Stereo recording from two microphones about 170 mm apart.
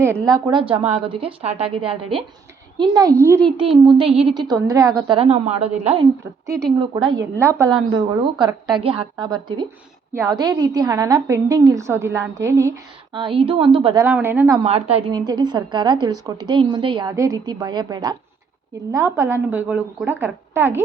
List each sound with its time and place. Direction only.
0.0 s a woman's voice: 15° right (ahead or behind)
3.8 s a woman's voice: 30° right (ahead or behind)
7.3 s a woman's voice: 15° right (ahead or behind)
7.9 s a woman's voice: 30° right (ahead or behind)
14.0 s a woman's voice: 15° right (ahead or behind)
14.6 s a woman's voice: 35° right (ahead or behind)
15.1 s a woman's voice: 25° right (ahead or behind)